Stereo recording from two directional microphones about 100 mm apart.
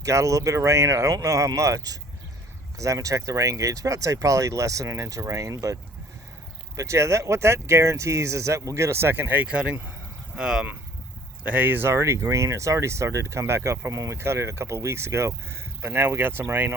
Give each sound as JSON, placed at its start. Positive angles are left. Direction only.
{"t": 0.0, "sound": "speech", "side_deg": -30}